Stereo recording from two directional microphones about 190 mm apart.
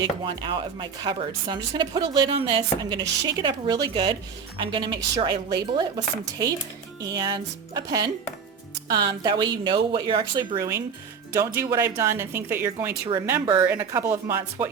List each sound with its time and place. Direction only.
0.0 s speech: 25° right (ahead or behind)
7.1 s speech: 20° right (ahead or behind)
13.4 s speech: 25° right (ahead or behind)
13.7 s speech: 10° right (ahead or behind)